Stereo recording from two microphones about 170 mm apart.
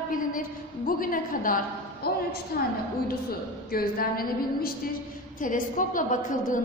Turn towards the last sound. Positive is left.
turn(degrees=50)  # may be behind; listen again after turning